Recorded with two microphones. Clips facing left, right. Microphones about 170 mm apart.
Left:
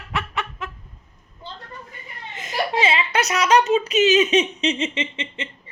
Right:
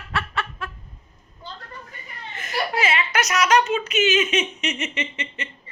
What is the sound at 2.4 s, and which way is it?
Speech, 25° left (ahead or behind).